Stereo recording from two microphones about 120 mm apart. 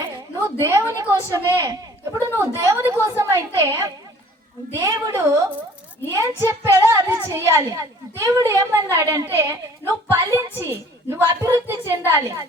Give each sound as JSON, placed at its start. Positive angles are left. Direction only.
{"t": 0.6, "sound": "a child's voice", "side_deg": -25}